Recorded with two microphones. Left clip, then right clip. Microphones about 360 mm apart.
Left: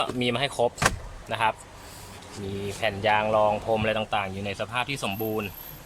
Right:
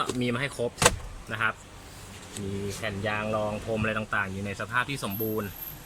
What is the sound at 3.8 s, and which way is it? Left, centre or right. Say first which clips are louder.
Speech: left 3 dB; centre.